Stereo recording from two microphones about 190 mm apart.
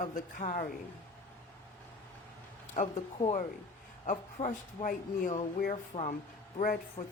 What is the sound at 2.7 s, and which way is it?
Speech, 35° left (ahead or behind).